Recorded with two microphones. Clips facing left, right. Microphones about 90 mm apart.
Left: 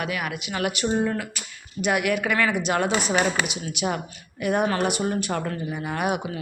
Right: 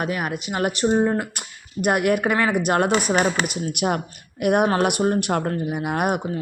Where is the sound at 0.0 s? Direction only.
40° right (ahead or behind).